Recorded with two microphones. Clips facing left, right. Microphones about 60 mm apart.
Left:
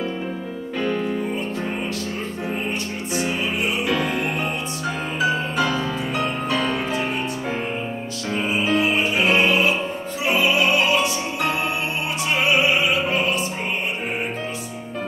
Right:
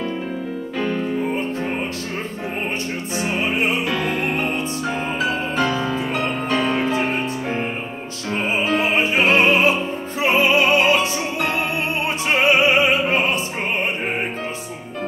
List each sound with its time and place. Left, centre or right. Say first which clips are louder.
0.7 s music: even; centre
3.2 s music: right 3 dB; right
4.8 s music: left 2 dB; centre
7.0 s music: right 3 dB; right
8.7 s music: right 2 dB; right
12.3 s music: right 3 dB; right